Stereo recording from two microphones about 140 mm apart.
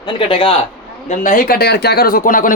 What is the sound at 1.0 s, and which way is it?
A man's voice, 70° left (ahead or behind).